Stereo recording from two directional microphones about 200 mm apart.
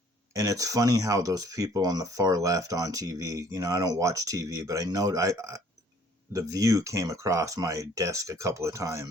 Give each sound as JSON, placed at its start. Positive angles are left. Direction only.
{"t": 0.3, "sound": "speech", "side_deg": -15}